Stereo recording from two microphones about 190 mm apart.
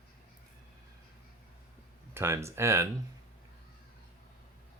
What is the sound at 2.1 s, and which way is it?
Speech, 15° right (ahead or behind).